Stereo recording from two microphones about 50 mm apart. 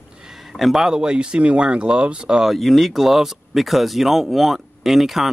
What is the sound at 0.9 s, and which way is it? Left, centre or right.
Speech, centre.